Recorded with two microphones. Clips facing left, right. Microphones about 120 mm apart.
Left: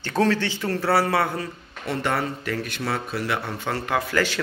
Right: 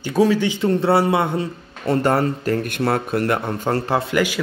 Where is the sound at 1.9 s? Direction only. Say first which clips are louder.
Right 7 dB; 40° right (ahead or behind).